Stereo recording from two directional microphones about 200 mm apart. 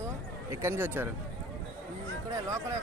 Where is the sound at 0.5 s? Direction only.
15° right (ahead or behind).